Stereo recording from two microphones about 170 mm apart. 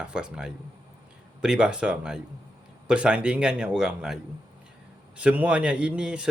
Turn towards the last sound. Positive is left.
turn(degrees=-5)  # may be behind; listen again after turning